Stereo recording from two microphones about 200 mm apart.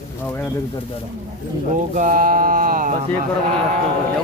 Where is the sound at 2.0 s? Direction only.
45° right (ahead or behind).